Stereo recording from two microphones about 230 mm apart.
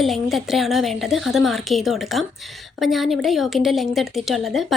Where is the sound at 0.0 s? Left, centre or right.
Centre.